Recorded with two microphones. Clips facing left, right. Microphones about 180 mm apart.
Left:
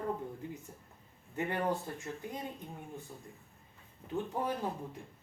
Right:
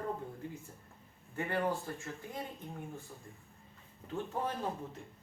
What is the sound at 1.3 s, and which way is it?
Speech, 20° left (ahead or behind).